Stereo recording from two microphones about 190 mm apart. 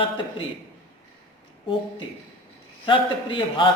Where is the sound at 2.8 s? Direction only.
25° left (ahead or behind).